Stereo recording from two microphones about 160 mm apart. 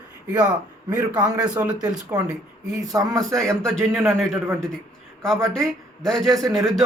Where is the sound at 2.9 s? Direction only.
20° right (ahead or behind).